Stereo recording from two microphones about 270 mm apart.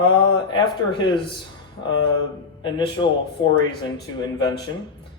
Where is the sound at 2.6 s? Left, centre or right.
Centre.